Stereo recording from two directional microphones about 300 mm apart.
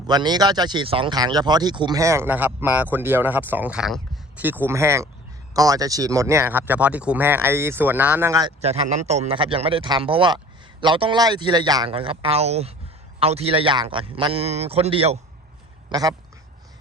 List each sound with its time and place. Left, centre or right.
0.1 s a man's voice: centre